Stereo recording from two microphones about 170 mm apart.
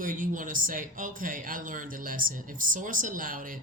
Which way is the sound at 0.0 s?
50° right (ahead or behind).